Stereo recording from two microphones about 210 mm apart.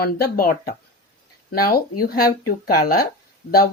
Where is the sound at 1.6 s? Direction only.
45° left (ahead or behind).